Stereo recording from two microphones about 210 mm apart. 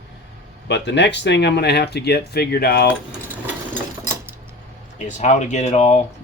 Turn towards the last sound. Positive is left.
turn(degrees=30)  # may be behind; listen again after turning